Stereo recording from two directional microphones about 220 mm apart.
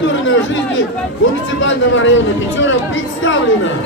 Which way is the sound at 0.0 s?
60° left (ahead or behind).